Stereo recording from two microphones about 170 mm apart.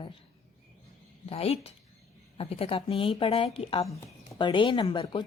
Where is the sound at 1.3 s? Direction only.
35° left (ahead or behind).